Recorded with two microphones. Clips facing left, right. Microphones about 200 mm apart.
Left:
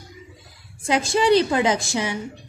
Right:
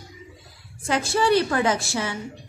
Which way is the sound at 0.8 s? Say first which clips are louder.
Left 3 dB; 15° left (ahead or behind).